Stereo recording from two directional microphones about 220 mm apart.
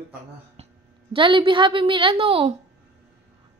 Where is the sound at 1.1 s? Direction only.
25° right (ahead or behind).